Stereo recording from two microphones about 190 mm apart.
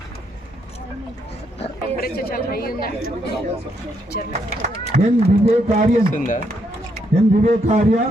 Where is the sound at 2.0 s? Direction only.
50° left (ahead or behind).